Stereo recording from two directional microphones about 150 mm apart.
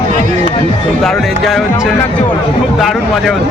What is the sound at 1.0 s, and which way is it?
Music, centre (ahead or behind).